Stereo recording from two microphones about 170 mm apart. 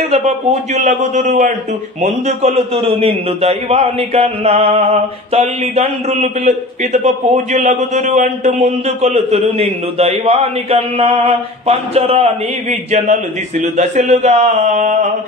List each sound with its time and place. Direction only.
0.1 s a man's voice: 40° right (ahead or behind)